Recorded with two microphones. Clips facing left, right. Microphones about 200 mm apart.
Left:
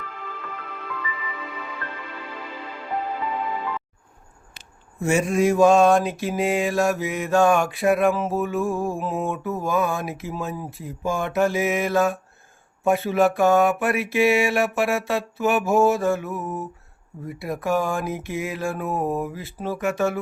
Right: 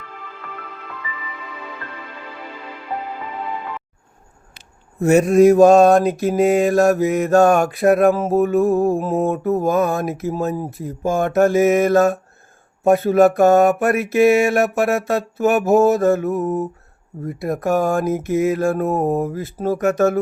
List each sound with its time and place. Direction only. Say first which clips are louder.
5.0 s mantra: right 8 dB; 40° right (ahead or behind)